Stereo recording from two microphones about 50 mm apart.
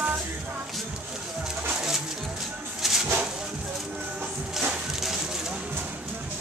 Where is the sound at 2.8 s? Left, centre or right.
Centre.